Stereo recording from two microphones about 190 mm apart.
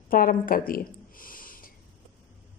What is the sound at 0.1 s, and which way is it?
Speech, 50° left (ahead or behind).